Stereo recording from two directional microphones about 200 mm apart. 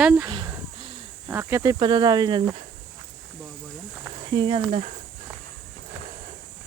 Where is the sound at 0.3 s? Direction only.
20° right (ahead or behind).